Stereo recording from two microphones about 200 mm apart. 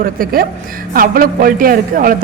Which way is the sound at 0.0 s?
45° right (ahead or behind).